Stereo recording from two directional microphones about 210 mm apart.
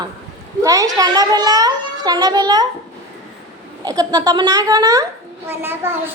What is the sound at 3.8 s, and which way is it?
A child's voice, 20° right (ahead or behind).